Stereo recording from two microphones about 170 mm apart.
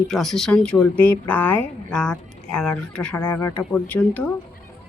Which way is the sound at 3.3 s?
20° left (ahead or behind).